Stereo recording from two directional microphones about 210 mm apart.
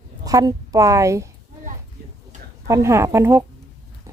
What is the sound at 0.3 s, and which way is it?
A woman's voice, 15° right (ahead or behind).